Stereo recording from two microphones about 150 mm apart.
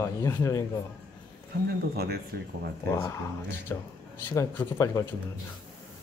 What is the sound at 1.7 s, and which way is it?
Speech, 90° right.